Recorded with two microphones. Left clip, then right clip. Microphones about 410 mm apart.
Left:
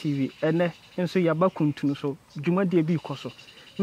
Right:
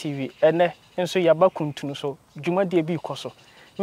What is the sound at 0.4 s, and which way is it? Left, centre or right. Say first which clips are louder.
Speech: right 8 dB; right.